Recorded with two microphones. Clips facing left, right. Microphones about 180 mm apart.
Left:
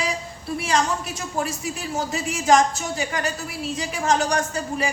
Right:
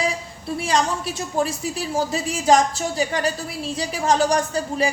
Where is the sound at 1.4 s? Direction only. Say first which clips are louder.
Right 4 dB; 30° right (ahead or behind).